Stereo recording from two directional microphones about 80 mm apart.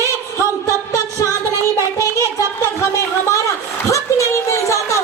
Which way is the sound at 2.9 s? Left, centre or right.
Left.